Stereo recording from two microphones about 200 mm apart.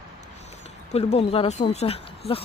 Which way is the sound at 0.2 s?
35° left (ahead or behind).